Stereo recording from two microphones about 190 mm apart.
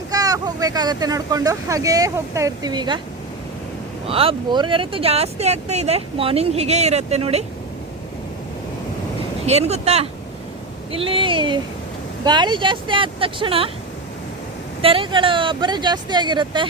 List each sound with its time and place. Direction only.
0.1 s speech: 20° right (ahead or behind)
4.1 s speech: 30° right (ahead or behind)
9.5 s speech: 35° right (ahead or behind)
14.8 s speech: 30° right (ahead or behind)